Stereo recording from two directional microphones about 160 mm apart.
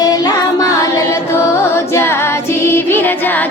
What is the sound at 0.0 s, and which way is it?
Music, 25° left (ahead or behind).